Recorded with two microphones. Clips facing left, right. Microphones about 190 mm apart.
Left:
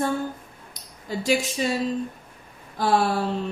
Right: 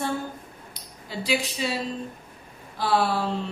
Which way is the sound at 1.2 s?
45° left (ahead or behind).